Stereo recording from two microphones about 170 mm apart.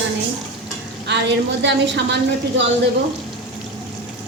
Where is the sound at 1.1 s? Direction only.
90° right.